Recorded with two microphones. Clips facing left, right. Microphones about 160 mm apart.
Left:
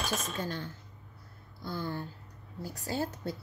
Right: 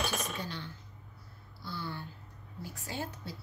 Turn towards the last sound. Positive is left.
turn(degrees=40)  # may be behind; listen again after turning